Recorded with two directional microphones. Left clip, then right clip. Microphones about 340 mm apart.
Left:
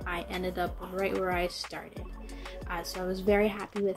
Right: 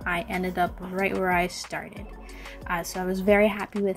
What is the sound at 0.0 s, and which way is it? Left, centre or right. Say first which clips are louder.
Music: right 7 dB; right.